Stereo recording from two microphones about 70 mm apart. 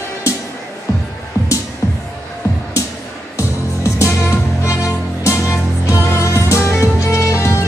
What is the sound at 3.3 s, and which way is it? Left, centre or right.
Music, left.